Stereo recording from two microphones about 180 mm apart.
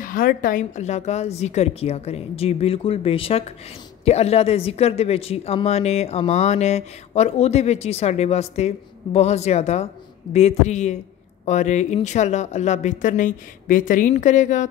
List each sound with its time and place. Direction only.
0.0 s speech: 50° left (ahead or behind)